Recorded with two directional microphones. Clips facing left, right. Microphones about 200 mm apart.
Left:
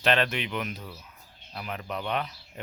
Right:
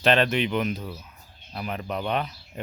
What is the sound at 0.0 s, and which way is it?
Speech, 30° right (ahead or behind).